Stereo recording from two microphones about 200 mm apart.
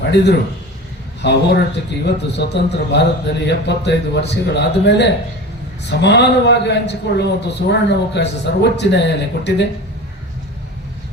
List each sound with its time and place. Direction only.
0.1 s a man's voice: 60° left (ahead or behind)